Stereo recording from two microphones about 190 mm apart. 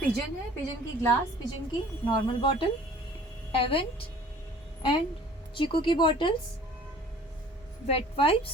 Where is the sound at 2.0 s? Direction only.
25° left (ahead or behind).